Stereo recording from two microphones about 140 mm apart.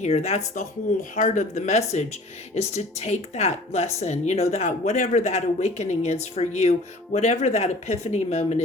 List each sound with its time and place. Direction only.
0.0 s speech: 55° left (ahead or behind)